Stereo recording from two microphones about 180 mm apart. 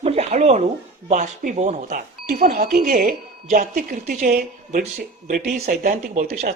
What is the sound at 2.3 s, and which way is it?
Speech, 55° right (ahead or behind).